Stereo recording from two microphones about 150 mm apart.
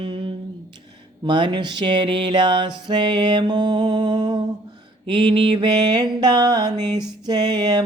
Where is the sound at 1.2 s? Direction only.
30° right (ahead or behind).